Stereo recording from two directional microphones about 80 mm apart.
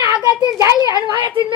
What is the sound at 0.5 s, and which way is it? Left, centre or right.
Speech, left.